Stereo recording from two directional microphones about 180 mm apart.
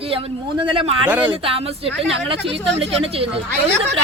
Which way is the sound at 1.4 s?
30° right (ahead or behind).